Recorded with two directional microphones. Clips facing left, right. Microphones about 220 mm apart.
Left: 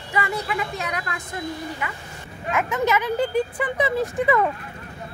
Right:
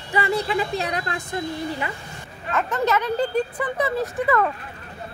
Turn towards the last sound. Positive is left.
turn(degrees=15)  # may be behind; listen again after turning